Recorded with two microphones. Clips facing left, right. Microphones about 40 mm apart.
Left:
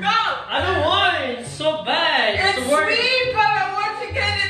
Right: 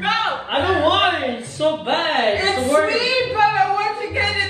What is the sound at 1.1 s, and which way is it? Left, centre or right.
A woman's voice, left.